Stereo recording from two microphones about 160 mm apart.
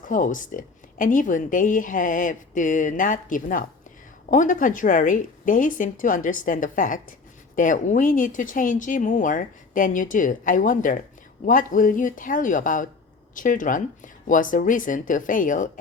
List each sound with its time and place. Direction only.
0.1 s speech: 55° left (ahead or behind)